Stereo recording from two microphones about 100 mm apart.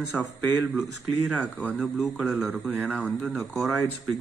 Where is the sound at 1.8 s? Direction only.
5° right (ahead or behind).